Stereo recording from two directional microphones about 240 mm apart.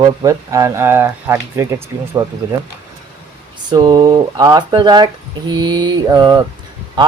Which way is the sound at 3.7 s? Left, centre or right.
Centre.